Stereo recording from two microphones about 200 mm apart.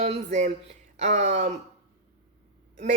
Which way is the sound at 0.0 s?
35° right (ahead or behind).